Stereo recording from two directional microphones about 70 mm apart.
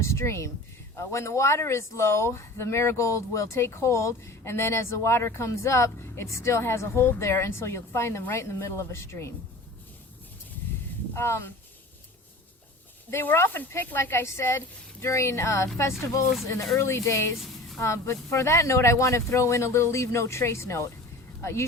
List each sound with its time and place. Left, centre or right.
0.0 s speech: left
11.1 s speech: left
13.1 s speech: left